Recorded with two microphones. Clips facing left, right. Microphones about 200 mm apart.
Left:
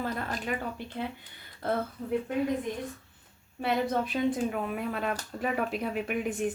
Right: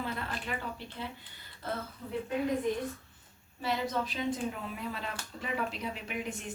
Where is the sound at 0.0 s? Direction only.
45° left (ahead or behind).